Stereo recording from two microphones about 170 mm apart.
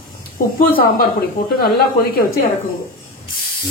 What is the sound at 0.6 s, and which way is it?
Speech, 60° left (ahead or behind).